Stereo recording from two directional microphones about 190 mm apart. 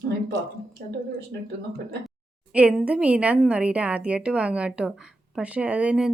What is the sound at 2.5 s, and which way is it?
A woman's voice, 5° right (ahead or behind).